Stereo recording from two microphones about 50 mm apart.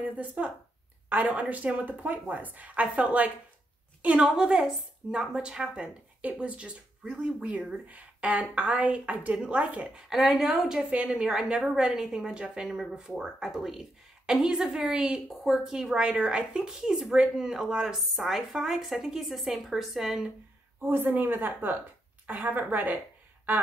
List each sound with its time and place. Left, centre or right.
0.0 s a woman's voice: right
1.0 s a sound: right
1.5 s a woman's voice: right
4.4 s speech: centre
6.2 s a woman's voice: right
9.9 s speech: centre
10.9 s a woman's voice: right
11.1 s speech: centre
16.0 s speech: right
17.9 s a woman's voice: centre
20.8 s a woman's voice: right